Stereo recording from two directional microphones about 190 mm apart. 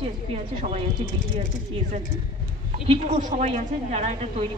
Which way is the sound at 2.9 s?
30° right (ahead or behind).